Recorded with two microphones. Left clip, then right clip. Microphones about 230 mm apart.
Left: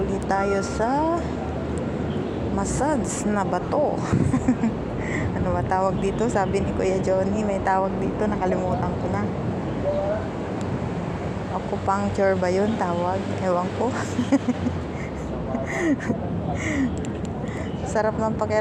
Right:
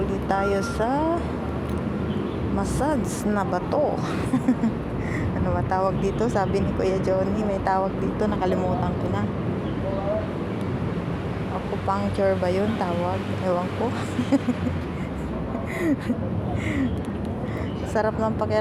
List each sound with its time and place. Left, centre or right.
0.1 s speech: centre
2.6 s speech: centre
5.7 s speech: centre
11.9 s speech: centre
15.8 s speech: centre
17.9 s speech: centre